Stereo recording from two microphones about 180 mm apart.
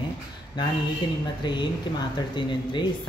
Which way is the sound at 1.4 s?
25° left (ahead or behind).